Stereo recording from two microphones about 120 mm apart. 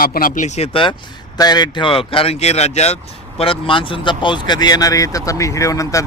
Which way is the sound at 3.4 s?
50° left (ahead or behind).